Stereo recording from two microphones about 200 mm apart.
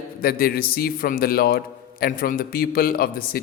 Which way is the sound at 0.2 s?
45° left (ahead or behind).